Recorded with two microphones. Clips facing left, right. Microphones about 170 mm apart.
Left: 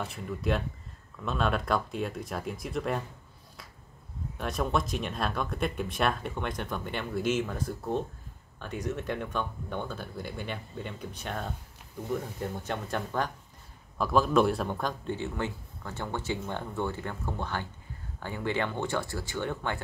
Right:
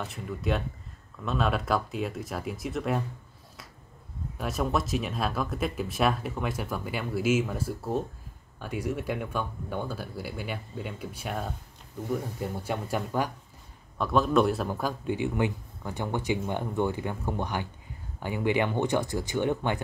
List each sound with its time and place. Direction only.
0.0 s speech: centre (ahead or behind)
4.4 s a man's voice: 5° right (ahead or behind)
13.9 s a man's voice: centre (ahead or behind); by 19.8 s 15° right (ahead or behind)